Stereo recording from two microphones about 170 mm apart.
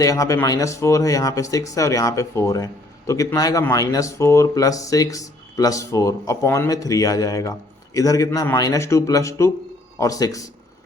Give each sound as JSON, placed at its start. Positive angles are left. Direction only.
{"t": 0.0, "sound": "speech", "side_deg": 20}